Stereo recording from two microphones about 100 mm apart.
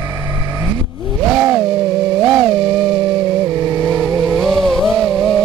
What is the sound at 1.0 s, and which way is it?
Vehicle, centre (ahead or behind).